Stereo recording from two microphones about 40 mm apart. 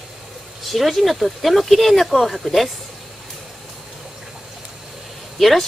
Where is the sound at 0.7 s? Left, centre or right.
Centre.